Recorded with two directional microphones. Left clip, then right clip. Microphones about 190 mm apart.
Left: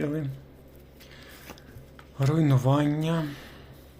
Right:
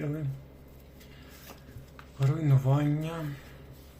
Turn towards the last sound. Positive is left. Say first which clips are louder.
# left 6 dB
turn(degrees=50)  # may be behind; listen again after turning